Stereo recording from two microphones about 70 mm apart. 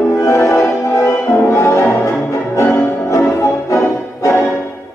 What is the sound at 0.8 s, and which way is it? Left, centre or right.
Music, left.